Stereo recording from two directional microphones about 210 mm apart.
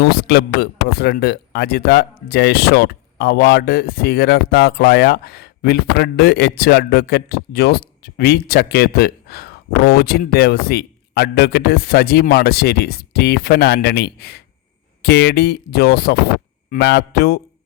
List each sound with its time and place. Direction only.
0.0 s speech: 50° left (ahead or behind)